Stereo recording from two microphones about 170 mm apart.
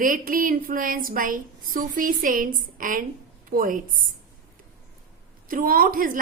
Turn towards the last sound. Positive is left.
turn(degrees=-55)  # may be behind; listen again after turning